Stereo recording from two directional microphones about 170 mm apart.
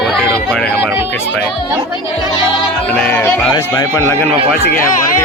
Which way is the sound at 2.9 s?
5° left (ahead or behind).